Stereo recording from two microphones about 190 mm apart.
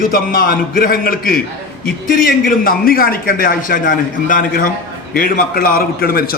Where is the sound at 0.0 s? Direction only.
50° left (ahead or behind).